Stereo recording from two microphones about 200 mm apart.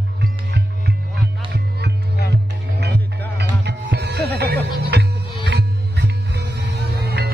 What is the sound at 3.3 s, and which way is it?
Music, 55° right (ahead or behind).